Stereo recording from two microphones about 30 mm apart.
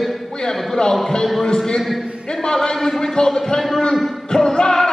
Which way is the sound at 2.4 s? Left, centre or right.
Centre.